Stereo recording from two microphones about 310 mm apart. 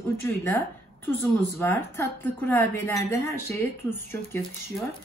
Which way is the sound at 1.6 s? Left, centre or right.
Centre.